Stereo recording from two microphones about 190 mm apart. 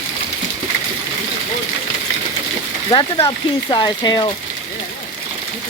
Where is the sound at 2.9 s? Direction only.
25° left (ahead or behind).